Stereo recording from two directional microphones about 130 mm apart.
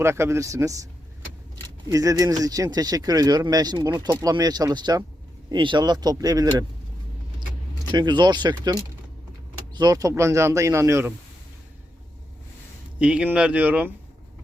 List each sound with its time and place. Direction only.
0.0 s speech: 20° right (ahead or behind)
1.9 s speech: 25° right (ahead or behind)
7.9 s speech: 35° right (ahead or behind)
13.0 s speech: 10° right (ahead or behind)